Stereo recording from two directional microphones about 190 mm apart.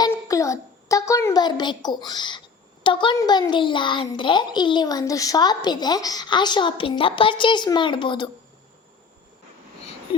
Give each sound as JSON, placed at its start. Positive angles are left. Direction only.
{"t": 0.0, "sound": "a child's voice", "side_deg": 15}